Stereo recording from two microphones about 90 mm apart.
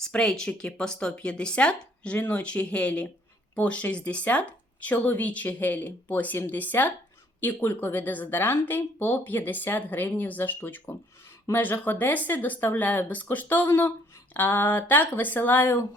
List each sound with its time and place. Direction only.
0.0 s speech: 10° left (ahead or behind)